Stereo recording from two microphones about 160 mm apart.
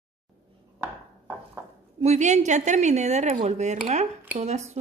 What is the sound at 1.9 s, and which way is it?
A woman's voice, 45° right (ahead or behind).